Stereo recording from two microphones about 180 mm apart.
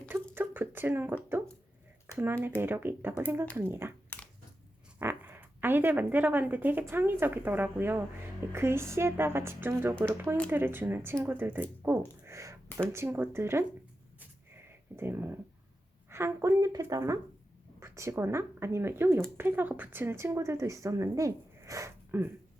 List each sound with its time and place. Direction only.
0.3 s a woman's voice: 10° right (ahead or behind)
4.9 s a woman's voice: 10° right (ahead or behind)
14.2 s a sound: 10° right (ahead or behind)
16.0 s a woman's voice: 15° right (ahead or behind)